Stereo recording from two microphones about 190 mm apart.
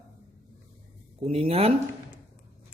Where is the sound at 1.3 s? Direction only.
30° right (ahead or behind).